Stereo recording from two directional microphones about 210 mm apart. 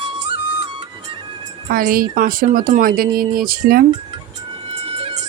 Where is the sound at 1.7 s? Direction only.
45° right (ahead or behind).